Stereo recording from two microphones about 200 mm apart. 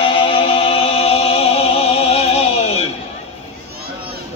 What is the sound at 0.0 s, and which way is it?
Music, 25° left (ahead or behind).